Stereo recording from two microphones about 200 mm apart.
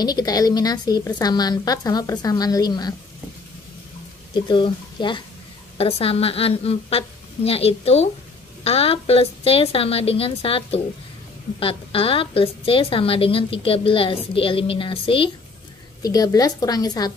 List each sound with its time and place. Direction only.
0.0 s a woman's voice: 20° left (ahead or behind)
4.3 s a woman's voice: 25° left (ahead or behind)